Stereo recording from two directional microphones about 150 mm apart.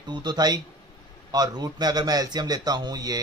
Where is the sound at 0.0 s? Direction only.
30° right (ahead or behind).